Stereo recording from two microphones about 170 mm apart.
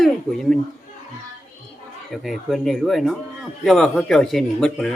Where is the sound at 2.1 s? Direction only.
Centre (ahead or behind).